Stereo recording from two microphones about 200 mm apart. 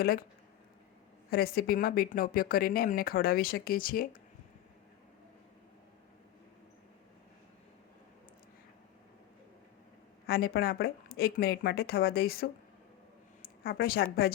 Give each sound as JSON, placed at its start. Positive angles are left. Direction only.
{"t": 0.0, "sound": "speech", "side_deg": 50}
{"t": 1.3, "sound": "speech", "side_deg": 50}
{"t": 10.2, "sound": "speech", "side_deg": 50}
{"t": 13.7, "sound": "speech", "side_deg": 50}